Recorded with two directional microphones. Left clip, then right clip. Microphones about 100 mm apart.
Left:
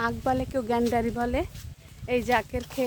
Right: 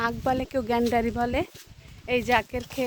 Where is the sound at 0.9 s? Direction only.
40° right (ahead or behind).